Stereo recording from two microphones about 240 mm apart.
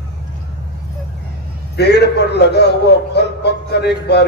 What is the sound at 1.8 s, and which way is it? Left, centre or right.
A man's voice, left.